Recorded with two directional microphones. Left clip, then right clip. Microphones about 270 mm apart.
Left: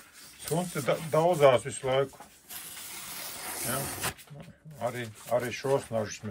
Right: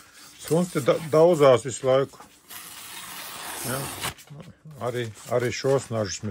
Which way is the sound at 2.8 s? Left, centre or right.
Centre.